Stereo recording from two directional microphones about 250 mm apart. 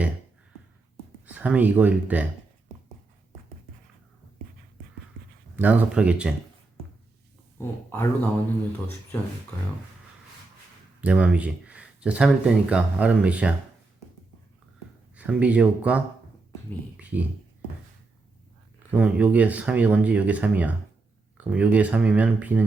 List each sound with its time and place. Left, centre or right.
1.2 s speech: centre
5.5 s speech: centre
7.6 s speech: centre
11.0 s speech: centre
15.1 s speech: centre
17.0 s a sound: centre
18.9 s speech: centre